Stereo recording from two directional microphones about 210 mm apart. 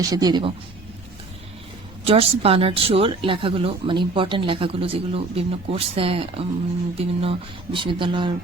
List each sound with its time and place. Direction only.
0.1 s speech: 20° right (ahead or behind)
2.0 s speech: 30° right (ahead or behind)